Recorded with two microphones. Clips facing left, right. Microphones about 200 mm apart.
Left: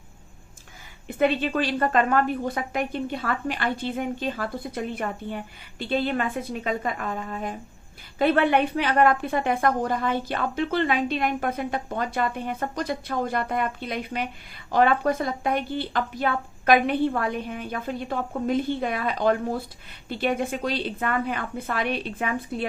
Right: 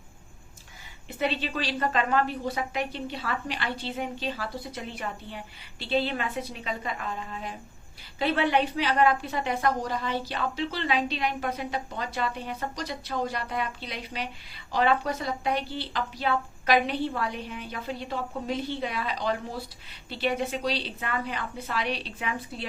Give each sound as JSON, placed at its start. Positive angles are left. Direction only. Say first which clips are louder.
{"t": 1.0, "sound": "a woman's voice", "louder": "left 7 dB", "side_deg": 50}